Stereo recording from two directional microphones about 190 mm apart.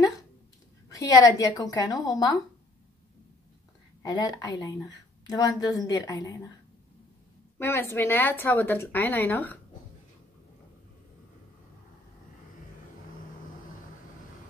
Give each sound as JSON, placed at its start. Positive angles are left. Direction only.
{"t": 0.9, "sound": "a woman's voice", "side_deg": 20}
{"t": 4.0, "sound": "a woman's voice", "side_deg": 20}
{"t": 7.5, "sound": "speech", "side_deg": 10}